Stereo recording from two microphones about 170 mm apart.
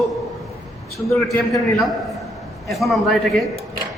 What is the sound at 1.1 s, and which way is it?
Speech, centre (ahead or behind).